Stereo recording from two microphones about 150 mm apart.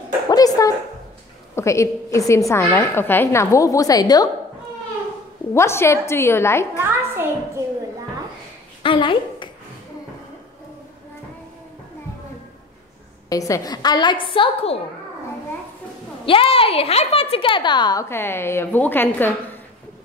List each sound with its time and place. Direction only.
0.3 s a woman's voice: 25° left (ahead or behind)
5.5 s a woman's voice: 15° left (ahead or behind)
6.8 s a child's voice: 15° right (ahead or behind)
8.8 s a woman's voice: 35° left (ahead or behind)
13.3 s a woman's voice: 25° left (ahead or behind); by 14.8 s 40° left (ahead or behind)
16.3 s a woman's voice: 35° left (ahead or behind)
18.0 s a woman's voice: 15° left (ahead or behind)